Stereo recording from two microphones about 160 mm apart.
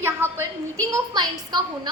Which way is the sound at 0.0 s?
15° right (ahead or behind).